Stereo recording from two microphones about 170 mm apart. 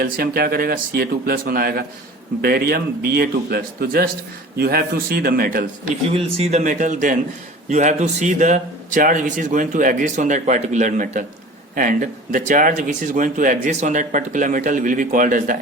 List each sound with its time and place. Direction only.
0.0 s speech: 60° right (ahead or behind)
6.3 s speech: 40° right (ahead or behind)